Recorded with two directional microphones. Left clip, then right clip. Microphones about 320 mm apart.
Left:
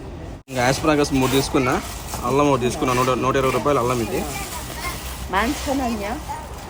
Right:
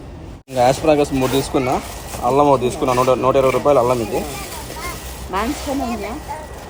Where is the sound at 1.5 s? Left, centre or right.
Centre.